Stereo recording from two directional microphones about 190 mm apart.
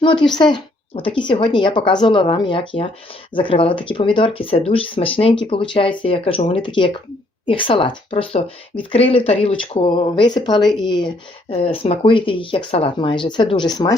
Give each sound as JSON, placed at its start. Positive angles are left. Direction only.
{"t": 0.3, "sound": "speech", "side_deg": 25}